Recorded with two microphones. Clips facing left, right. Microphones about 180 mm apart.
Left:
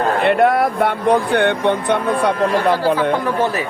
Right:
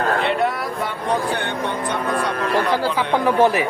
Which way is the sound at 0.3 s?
55° left (ahead or behind).